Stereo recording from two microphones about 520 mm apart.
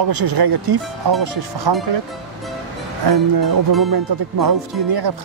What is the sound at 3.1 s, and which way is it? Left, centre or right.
Speech, right.